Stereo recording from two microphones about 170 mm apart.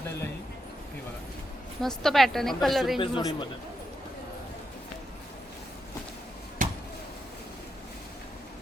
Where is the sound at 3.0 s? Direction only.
30° left (ahead or behind).